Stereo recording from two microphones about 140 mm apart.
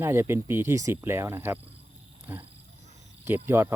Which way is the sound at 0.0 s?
15° right (ahead or behind).